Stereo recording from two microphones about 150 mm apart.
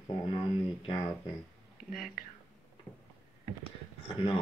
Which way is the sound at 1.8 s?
70° left (ahead or behind).